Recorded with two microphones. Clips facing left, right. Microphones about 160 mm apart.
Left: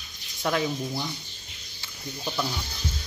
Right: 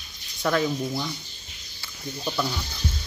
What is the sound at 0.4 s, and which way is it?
Speech, 20° left (ahead or behind).